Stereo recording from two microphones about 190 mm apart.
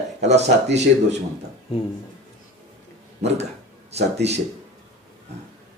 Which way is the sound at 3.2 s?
35° right (ahead or behind).